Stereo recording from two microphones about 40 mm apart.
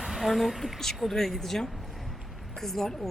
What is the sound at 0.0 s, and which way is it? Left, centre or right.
A woman's voice, centre.